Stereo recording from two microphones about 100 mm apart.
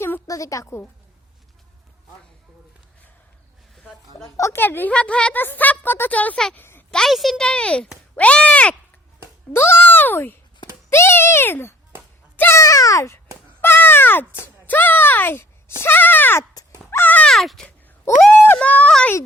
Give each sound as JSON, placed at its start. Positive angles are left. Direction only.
{"t": 0.3, "sound": "speech", "side_deg": 35}
{"t": 4.4, "sound": "a child's voice", "side_deg": 30}
{"t": 4.6, "sound": "speech", "side_deg": 20}
{"t": 6.6, "sound": "a sound", "side_deg": 20}
{"t": 6.9, "sound": "speech", "side_deg": 0}
{"t": 9.5, "sound": "a child's voice", "side_deg": 25}
{"t": 13.6, "sound": "speech", "side_deg": 20}
{"t": 16.9, "sound": "a sound", "side_deg": 20}
{"t": 17.2, "sound": "a sound", "side_deg": 0}
{"t": 18.1, "sound": "a child's voice", "side_deg": 25}
{"t": 18.4, "sound": "speech", "side_deg": 15}